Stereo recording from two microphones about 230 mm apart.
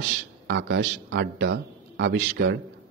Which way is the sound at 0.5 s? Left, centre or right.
Right.